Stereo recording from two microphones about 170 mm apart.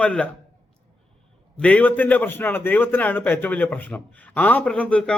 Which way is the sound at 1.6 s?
10° left (ahead or behind).